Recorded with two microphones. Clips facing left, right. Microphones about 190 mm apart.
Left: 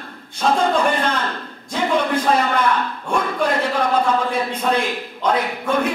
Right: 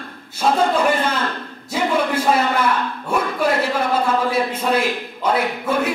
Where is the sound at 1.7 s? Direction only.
5° right (ahead or behind).